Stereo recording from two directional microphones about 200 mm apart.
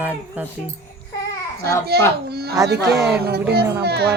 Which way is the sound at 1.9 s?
55° right (ahead or behind).